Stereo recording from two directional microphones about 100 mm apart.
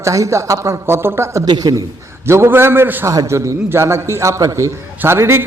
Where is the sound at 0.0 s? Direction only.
30° right (ahead or behind).